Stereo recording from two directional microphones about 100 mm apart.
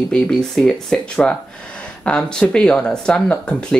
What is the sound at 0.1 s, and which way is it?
Speech, 5° left (ahead or behind).